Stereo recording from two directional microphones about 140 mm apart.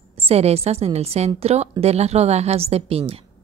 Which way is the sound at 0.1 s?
45° right (ahead or behind).